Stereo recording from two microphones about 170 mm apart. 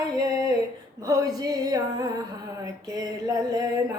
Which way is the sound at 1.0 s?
20° right (ahead or behind).